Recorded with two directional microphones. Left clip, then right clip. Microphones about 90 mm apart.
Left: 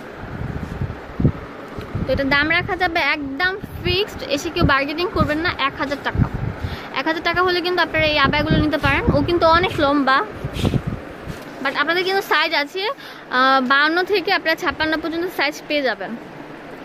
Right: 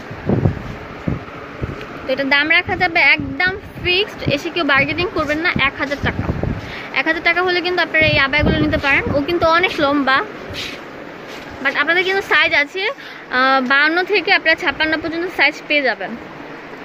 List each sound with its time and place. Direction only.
2.0 s speech: 10° left (ahead or behind)
11.6 s speech: 20° left (ahead or behind)